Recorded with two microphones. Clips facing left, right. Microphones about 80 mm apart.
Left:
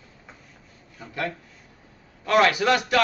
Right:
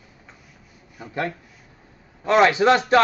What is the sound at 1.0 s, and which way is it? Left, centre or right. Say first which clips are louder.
Speech: right 3 dB; centre.